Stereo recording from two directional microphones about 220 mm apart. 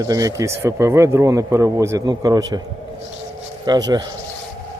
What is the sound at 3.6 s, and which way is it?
Speech, 20° right (ahead or behind).